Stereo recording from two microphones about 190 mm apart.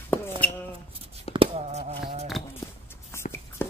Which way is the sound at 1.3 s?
30° right (ahead or behind).